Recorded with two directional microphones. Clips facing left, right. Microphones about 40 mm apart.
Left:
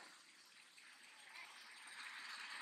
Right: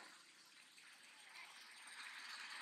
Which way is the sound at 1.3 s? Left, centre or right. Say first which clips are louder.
Left 2 dB; centre.